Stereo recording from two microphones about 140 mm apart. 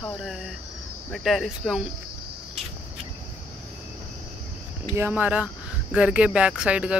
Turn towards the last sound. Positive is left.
turn(degrees=-5)  # may be behind; listen again after turning